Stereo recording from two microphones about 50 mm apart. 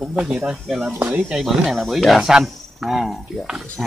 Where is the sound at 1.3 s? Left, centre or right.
Centre.